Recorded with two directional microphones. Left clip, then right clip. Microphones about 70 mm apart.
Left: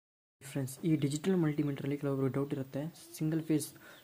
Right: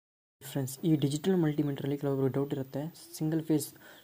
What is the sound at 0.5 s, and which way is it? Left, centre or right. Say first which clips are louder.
Speech: right 3 dB; right.